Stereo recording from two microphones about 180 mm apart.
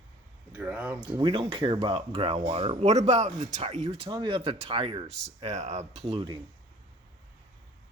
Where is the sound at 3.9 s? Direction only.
30° right (ahead or behind).